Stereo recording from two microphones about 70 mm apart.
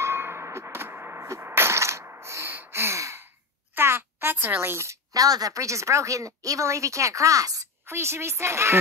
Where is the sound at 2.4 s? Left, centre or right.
Right.